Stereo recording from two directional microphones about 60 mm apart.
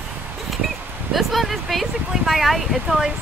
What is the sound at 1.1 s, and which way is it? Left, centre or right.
Speech, centre.